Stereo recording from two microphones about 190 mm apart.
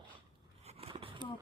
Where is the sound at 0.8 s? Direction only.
30° right (ahead or behind).